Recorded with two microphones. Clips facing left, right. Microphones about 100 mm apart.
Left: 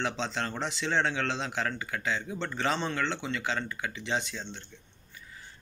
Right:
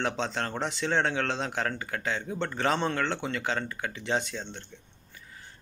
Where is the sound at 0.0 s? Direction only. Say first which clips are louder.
Right 2 dB; 45° right (ahead or behind).